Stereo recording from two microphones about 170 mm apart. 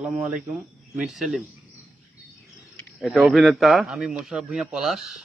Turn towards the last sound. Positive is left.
turn(degrees=0)  # may be behind; listen again after turning